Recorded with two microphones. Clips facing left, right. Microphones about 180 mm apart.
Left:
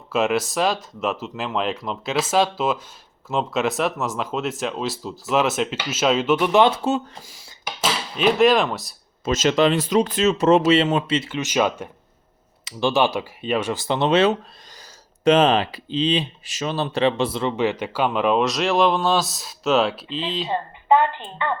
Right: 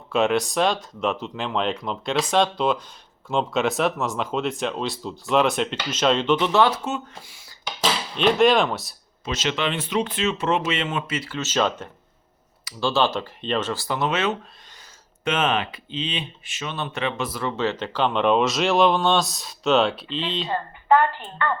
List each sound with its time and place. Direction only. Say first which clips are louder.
0.1 s speech: even; centre (ahead or behind); by 6.7 s 20° left (ahead or behind)
6.8 s speech: left 6 dB; 35° left (ahead or behind)
7.8 s speech: even; 5° left (ahead or behind)
9.2 s speech: left 8 dB; 45° left (ahead or behind); by 20.5 s centre (ahead or behind)
20.5 s a woman's voice: left 1 dB; 20° left (ahead or behind)